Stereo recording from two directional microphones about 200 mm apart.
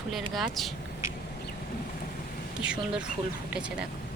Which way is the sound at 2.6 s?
5° right (ahead or behind).